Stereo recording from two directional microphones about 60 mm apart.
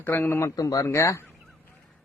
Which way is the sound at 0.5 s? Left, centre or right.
Left.